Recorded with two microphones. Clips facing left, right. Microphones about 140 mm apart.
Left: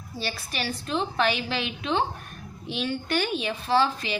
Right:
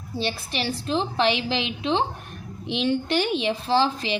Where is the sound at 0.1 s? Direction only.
25° right (ahead or behind).